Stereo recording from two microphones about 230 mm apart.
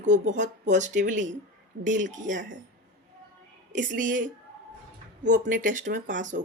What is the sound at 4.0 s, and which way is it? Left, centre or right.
Speech, right.